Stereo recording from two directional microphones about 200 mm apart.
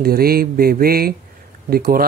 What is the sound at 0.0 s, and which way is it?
Speech, 50° right (ahead or behind).